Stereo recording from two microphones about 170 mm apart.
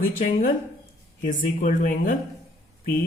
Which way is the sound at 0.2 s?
55° left (ahead or behind).